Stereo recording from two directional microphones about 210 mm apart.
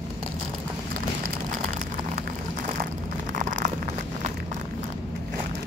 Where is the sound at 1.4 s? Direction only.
40° right (ahead or behind).